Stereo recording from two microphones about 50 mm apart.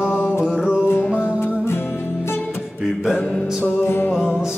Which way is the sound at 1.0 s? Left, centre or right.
Left.